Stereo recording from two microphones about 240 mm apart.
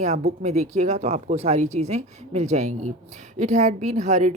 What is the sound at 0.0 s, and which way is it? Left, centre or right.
A woman's voice, right.